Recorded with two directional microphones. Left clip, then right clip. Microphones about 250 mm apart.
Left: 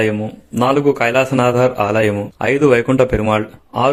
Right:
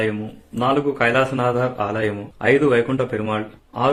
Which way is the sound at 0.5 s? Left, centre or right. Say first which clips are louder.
Left 5 dB; left.